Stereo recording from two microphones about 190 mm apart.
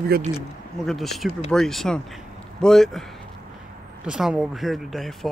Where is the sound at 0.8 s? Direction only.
Centre (ahead or behind).